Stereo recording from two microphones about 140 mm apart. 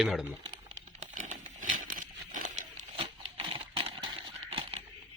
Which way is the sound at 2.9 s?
40° right (ahead or behind).